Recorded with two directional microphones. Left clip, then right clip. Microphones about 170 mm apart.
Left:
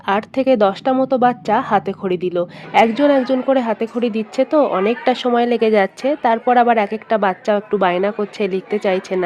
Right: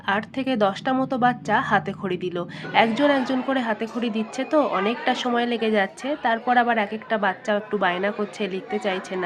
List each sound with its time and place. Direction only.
0.0 s a woman's voice: 45° left (ahead or behind); by 3.4 s 25° left (ahead or behind)
3.5 s a woman's voice: 40° left (ahead or behind)